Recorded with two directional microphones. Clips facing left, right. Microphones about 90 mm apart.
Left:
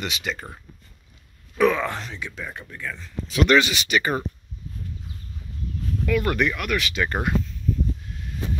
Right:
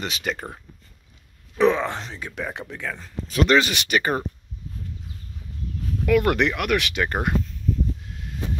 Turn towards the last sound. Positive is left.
turn(degrees=-55)  # may be behind; listen again after turning